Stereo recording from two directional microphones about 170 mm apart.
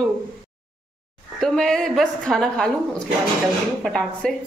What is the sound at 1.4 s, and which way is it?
A woman's voice, 5° left (ahead or behind).